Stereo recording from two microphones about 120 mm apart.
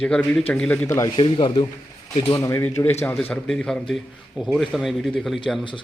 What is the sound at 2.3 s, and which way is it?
Speech, 25° left (ahead or behind).